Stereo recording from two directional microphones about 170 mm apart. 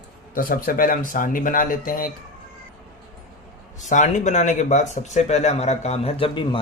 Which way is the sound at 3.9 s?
45° left (ahead or behind).